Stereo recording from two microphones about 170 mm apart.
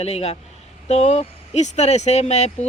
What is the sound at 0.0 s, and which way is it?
Speech, 40° left (ahead or behind).